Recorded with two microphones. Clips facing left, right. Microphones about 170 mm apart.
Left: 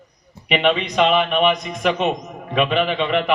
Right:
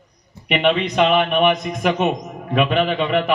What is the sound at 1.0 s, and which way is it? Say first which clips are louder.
A man's voice: right 1 dB; 50° right (ahead or behind).